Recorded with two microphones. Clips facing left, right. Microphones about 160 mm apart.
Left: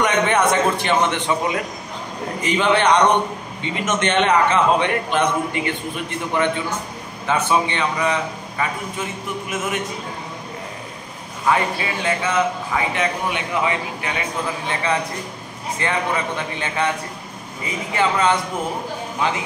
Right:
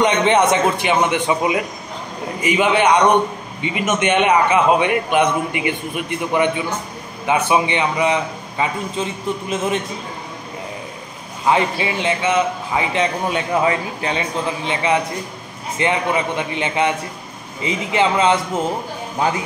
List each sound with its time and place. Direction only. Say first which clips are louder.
0.0 s a man's voice: right 3 dB; 20° right (ahead or behind)
11.4 s a man's voice: right 3 dB; 20° right (ahead or behind)
13.5 s a man's voice: right 5 dB; 40° right (ahead or behind)
14.7 s a man's voice: right 4 dB; 20° right (ahead or behind)
19.1 s speech: right 3 dB; 40° right (ahead or behind)